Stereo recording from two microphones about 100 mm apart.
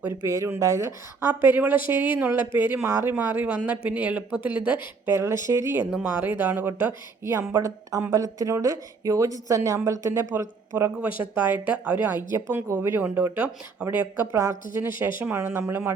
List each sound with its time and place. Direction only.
0.1 s speech: 30° right (ahead or behind)
5.0 s speech: 25° right (ahead or behind)
5.9 s speech: 10° right (ahead or behind)
7.5 s a woman's voice: 35° right (ahead or behind); by 12.1 s 15° right (ahead or behind)
12.3 s speech: 25° right (ahead or behind)
14.3 s speech: 25° right (ahead or behind)